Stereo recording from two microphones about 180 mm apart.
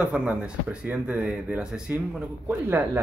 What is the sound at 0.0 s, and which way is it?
Speech, 10° right (ahead or behind).